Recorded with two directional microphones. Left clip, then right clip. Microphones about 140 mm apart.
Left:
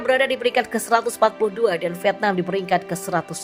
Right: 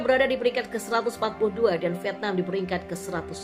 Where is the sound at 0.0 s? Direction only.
45° left (ahead or behind).